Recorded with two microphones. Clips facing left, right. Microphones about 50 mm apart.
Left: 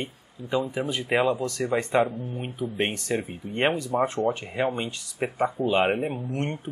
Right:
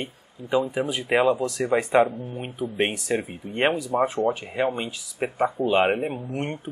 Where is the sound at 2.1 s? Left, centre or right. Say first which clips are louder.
Right 1 dB; right.